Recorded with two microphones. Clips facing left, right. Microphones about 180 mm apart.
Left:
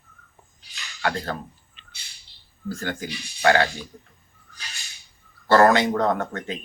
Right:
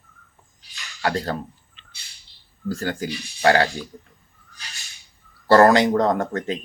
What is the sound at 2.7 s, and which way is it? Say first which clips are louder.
Speech: right 4 dB; 35° right (ahead or behind).